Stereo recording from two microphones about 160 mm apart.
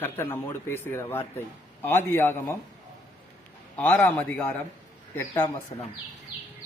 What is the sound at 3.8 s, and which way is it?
Speech, 10° left (ahead or behind).